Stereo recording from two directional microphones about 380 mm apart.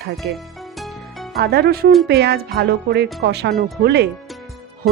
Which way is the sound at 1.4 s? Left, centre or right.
Right.